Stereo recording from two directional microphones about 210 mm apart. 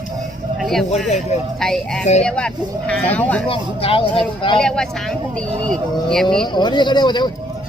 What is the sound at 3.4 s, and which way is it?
Speech, 25° left (ahead or behind).